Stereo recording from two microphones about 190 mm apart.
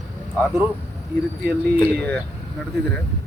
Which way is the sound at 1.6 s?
5° left (ahead or behind).